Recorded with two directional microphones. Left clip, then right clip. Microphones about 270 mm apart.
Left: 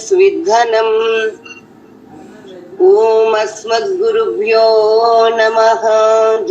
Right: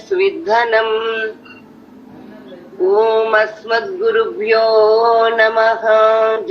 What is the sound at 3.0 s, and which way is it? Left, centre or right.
Female singing, centre.